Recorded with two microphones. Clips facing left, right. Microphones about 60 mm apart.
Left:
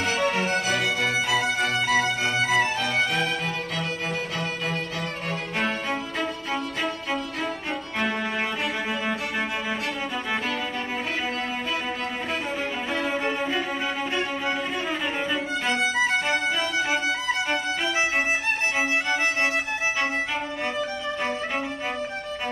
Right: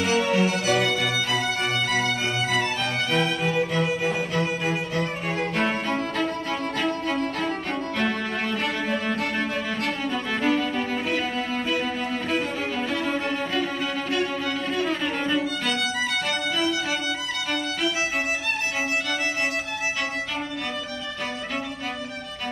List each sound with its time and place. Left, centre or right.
0.0 s music: left
1.9 s music: centre
3.1 s music: centre
12.9 s music: centre
14.8 s violin: centre
15.7 s music: left